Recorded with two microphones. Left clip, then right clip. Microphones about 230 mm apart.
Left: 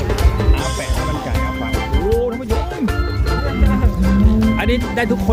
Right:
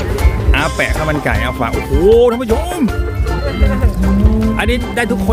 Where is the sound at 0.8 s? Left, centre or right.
Right.